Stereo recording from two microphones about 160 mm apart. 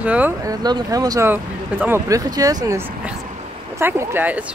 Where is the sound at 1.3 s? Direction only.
15° right (ahead or behind).